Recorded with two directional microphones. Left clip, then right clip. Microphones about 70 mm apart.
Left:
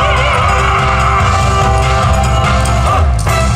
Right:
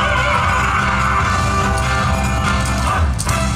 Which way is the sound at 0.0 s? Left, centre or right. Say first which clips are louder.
Left 4 dB; left.